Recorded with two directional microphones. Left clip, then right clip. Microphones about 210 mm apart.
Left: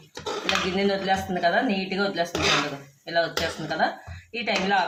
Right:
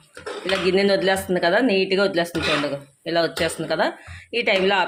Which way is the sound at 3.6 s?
50° right (ahead or behind).